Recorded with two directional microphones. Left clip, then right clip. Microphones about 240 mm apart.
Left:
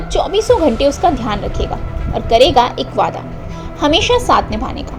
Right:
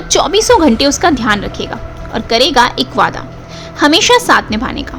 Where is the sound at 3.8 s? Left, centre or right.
Right.